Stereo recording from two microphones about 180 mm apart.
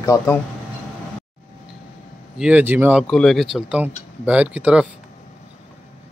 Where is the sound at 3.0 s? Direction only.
Centre (ahead or behind).